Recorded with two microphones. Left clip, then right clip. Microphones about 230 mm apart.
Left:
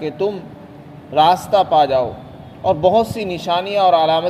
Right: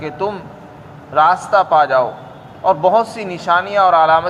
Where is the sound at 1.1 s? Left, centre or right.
Centre.